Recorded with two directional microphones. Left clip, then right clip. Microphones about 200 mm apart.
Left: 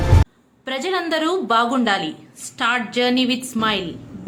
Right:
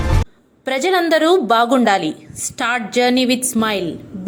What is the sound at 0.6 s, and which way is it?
A woman's voice, 30° right (ahead or behind).